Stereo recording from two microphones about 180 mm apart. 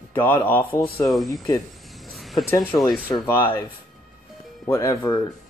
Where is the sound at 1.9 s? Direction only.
Centre (ahead or behind).